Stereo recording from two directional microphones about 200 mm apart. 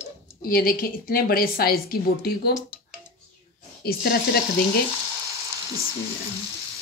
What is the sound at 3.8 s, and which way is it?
Speech, 50° left (ahead or behind).